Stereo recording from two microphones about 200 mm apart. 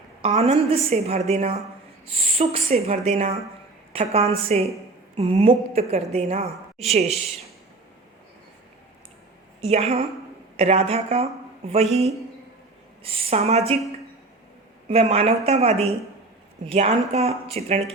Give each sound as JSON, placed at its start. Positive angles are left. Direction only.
{"t": 0.2, "sound": "a woman's voice", "side_deg": -35}
{"t": 9.6, "sound": "a woman's voice", "side_deg": -30}
{"t": 14.8, "sound": "a woman's voice", "side_deg": -30}